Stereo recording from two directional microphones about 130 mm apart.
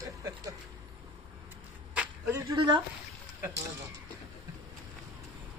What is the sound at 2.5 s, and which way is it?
Speech, 35° right (ahead or behind).